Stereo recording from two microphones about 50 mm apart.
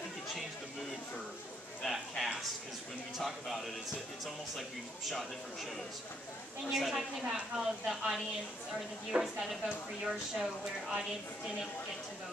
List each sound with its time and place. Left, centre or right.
1.8 s a sound: centre
3.2 s a woman's voice: centre
6.7 s a woman's voice: centre